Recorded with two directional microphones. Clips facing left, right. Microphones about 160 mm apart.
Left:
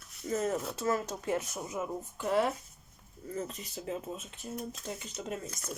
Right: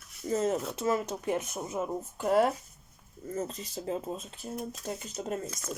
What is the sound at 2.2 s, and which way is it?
Speech, 45° right (ahead or behind).